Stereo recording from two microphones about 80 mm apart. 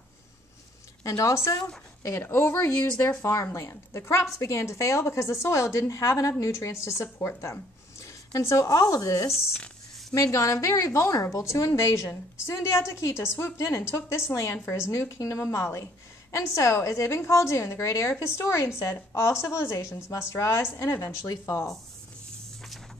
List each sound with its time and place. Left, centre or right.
1.0 s speech: left